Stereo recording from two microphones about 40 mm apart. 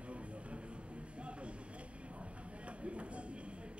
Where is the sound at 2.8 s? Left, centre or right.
Right.